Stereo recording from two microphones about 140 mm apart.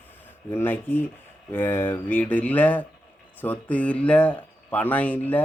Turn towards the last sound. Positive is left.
turn(degrees=10)  # may be behind; listen again after turning